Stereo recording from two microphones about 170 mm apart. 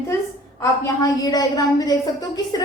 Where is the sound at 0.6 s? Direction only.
20° left (ahead or behind).